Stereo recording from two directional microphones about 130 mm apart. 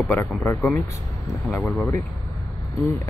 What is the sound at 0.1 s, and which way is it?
Speech, 20° left (ahead or behind).